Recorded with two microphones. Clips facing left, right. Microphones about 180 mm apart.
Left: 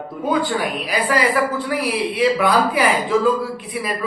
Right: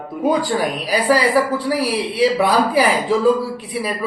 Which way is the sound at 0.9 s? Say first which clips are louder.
Right 4 dB; 35° right (ahead or behind).